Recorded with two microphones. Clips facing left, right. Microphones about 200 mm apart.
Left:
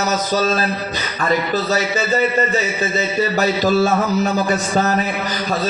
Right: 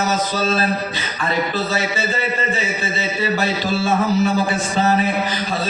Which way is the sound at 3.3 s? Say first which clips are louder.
Left 5 dB; 40° left (ahead or behind).